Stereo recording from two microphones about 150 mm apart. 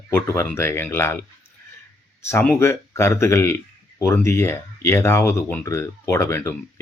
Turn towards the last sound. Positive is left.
turn(degrees=20)  # may be behind; listen again after turning